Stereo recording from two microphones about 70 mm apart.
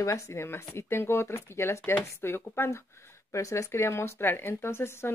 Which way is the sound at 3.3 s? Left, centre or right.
Left.